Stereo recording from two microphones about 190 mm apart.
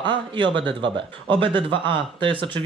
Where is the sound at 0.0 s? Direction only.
25° right (ahead or behind).